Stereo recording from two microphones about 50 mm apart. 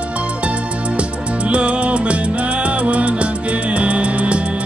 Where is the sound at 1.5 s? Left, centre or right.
Right.